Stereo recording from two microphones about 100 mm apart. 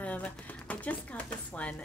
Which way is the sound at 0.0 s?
15° left (ahead or behind).